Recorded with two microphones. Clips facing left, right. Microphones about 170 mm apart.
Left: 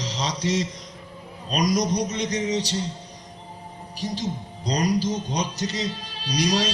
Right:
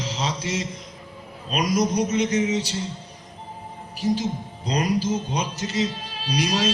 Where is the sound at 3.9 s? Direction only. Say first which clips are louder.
Right 5 dB; 35° left (ahead or behind).